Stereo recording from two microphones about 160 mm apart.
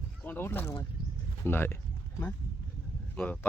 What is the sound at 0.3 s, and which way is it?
Speech, 10° left (ahead or behind).